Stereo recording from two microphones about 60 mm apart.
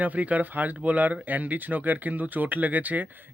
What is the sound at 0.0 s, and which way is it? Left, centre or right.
Speech, right.